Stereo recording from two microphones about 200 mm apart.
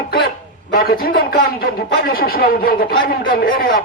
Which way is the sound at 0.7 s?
50° left (ahead or behind).